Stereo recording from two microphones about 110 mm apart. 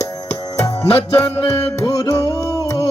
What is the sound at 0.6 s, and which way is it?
Music, 30° left (ahead or behind).